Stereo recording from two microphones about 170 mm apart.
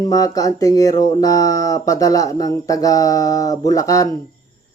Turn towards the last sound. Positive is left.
turn(degrees=20)  # may be behind; listen again after turning